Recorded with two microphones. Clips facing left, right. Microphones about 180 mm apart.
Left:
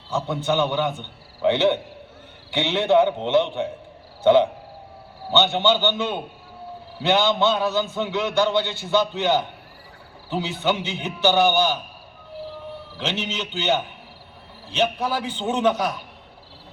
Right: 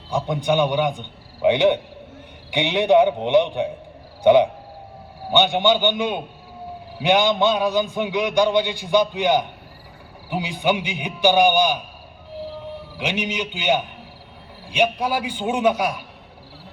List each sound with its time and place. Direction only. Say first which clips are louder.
0.1 s a man's voice: right 2 dB; 15° right (ahead or behind)
13.0 s a man's voice: right 3 dB; 15° right (ahead or behind)